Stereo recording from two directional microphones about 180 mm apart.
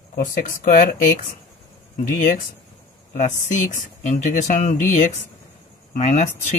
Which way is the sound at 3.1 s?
45° left (ahead or behind).